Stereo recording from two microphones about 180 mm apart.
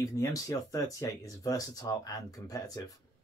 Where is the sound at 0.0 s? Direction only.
20° left (ahead or behind).